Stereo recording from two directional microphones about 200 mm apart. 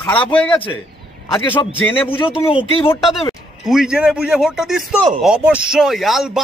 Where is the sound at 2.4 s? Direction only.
25° left (ahead or behind).